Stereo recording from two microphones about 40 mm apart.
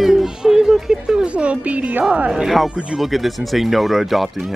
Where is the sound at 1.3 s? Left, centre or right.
Right.